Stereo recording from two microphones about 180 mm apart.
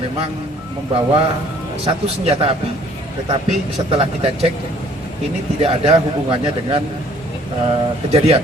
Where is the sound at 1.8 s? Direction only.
35° right (ahead or behind).